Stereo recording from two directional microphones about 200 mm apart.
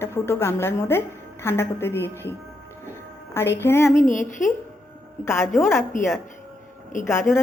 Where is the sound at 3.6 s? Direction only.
15° left (ahead or behind).